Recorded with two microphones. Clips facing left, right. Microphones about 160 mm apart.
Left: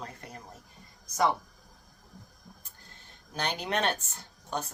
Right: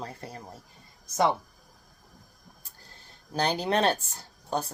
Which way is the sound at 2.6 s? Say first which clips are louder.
Right 1 dB; 35° right (ahead or behind).